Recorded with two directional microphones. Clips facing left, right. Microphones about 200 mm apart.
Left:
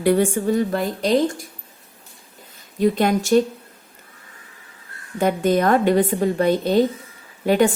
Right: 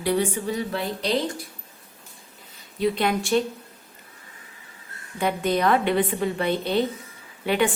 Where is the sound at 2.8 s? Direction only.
45° left (ahead or behind).